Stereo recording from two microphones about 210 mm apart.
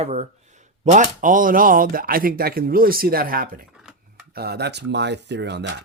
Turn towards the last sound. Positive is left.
turn(degrees=-55)  # may be behind; listen again after turning